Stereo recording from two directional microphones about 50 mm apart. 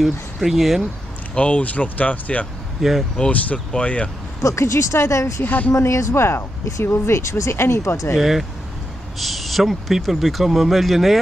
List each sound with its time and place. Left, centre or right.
0.0 s speech: centre
1.3 s speech: left
2.8 s speech: centre
3.5 s speech: left
4.4 s speech: left
5.4 s a woman's voice: left
5.7 s speech: left
8.2 s speech: centre